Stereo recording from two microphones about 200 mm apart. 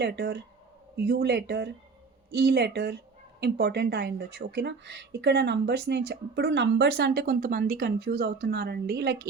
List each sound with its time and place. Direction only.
0.0 s a woman's voice: 55° right (ahead or behind)